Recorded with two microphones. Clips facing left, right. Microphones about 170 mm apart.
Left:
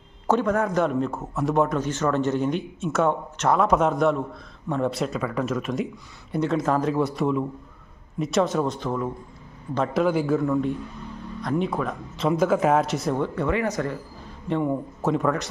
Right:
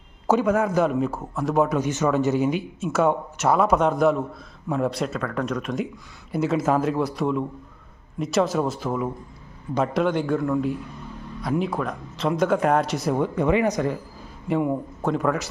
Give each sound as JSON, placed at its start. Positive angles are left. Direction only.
{"t": 0.3, "sound": "speech", "side_deg": -5}
{"t": 9.9, "sound": "speech", "side_deg": 5}
{"t": 13.1, "sound": "speech", "side_deg": -15}